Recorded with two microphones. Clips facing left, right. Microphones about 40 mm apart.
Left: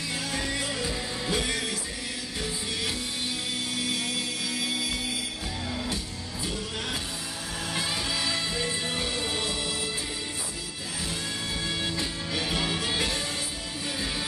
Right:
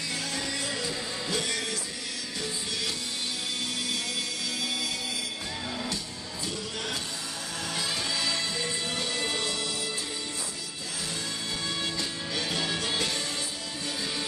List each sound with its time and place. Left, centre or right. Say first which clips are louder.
0.3 s music: left 2 dB; centre
4.6 s music: left 1 dB; left
7.7 s music: left 1 dB; left
11.8 s music: left 1 dB; centre